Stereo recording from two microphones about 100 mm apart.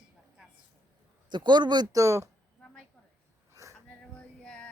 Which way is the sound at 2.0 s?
30° right (ahead or behind).